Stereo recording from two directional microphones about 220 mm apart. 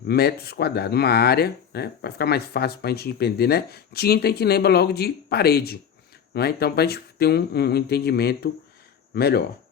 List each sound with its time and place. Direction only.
0.1 s speech: 45° left (ahead or behind)